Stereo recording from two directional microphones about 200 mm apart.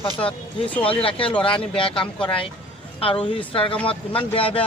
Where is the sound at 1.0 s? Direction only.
25° left (ahead or behind).